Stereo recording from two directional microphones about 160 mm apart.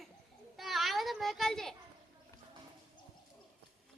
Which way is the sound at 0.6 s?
Centre (ahead or behind).